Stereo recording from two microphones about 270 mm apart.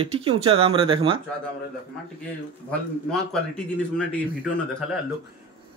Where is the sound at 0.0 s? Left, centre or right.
Right.